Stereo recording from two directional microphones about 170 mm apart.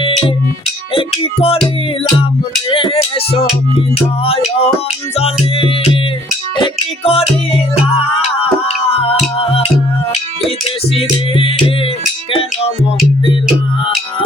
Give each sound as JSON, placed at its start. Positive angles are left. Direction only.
{"t": 0.9, "sound": "music", "side_deg": 35}
{"t": 2.6, "sound": "music", "side_deg": 30}
{"t": 10.9, "sound": "music", "side_deg": 35}